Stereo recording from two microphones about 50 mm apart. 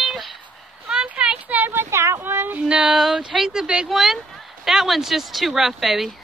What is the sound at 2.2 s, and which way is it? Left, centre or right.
Child singing, right.